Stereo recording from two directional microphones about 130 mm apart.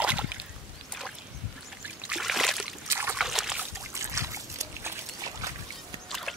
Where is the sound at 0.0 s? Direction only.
10° right (ahead or behind).